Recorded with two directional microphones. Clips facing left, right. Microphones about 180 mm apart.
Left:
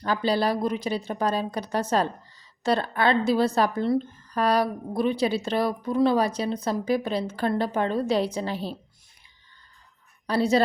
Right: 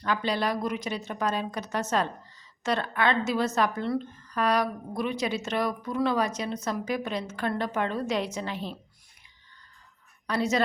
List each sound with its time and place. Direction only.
0.0 s speech: 35° left (ahead or behind)
10.2 s speech: 35° left (ahead or behind)